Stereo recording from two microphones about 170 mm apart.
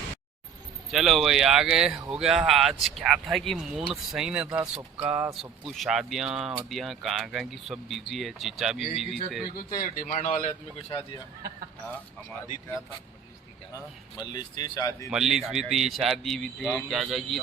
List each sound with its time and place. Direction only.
0.9 s speech: centre (ahead or behind)
9.6 s speech: 55° left (ahead or behind)
13.7 s speech: 25° left (ahead or behind)
15.1 s speech: centre (ahead or behind)